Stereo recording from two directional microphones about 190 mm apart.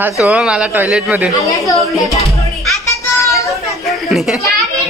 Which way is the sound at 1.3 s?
15° left (ahead or behind).